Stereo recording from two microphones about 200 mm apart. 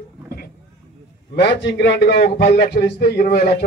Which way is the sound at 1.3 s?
55° left (ahead or behind).